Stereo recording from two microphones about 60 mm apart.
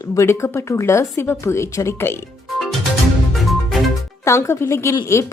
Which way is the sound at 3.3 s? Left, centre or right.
Centre.